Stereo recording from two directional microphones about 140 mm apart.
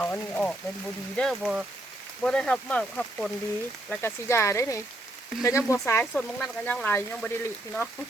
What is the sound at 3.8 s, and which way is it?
Speech, 20° left (ahead or behind).